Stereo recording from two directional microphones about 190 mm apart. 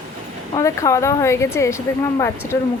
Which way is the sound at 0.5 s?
15° left (ahead or behind).